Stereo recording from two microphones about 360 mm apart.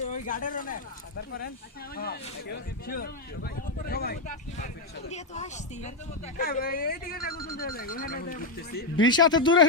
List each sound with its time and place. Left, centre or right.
0.0 s speech: left
9.0 s speech: centre